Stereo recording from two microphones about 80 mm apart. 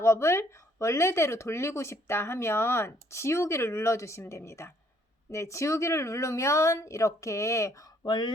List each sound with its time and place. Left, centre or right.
0.0 s speech: left
8.0 s speech: left